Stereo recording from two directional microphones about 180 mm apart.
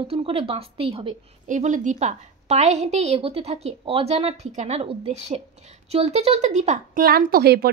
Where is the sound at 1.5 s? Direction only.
45° right (ahead or behind).